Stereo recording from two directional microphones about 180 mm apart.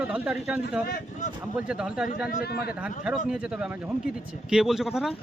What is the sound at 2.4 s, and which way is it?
Speech, 60° left (ahead or behind).